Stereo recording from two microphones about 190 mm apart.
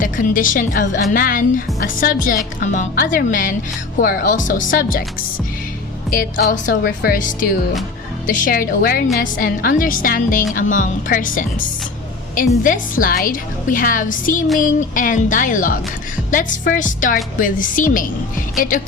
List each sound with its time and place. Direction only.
0.0 s a woman's voice: 45° left (ahead or behind)
6.5 s a woman's voice: 50° left (ahead or behind)
12.6 s a woman's voice: 45° left (ahead or behind)